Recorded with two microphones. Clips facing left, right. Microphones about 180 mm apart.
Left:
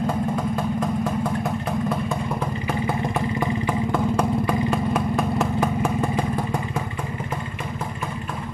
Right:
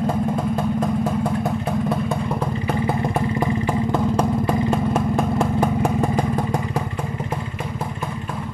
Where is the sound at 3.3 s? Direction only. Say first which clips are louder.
Right 2 dB; 25° right (ahead or behind).